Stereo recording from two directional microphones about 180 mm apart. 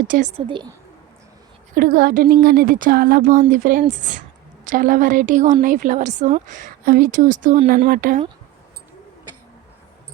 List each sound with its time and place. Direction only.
0.1 s a woman's voice: 40° right (ahead or behind)
0.4 s a woman's voice: 25° right (ahead or behind)
1.7 s a woman's voice: 50° right (ahead or behind); by 7.9 s 35° right (ahead or behind)
7.9 s a woman's voice: 50° right (ahead or behind)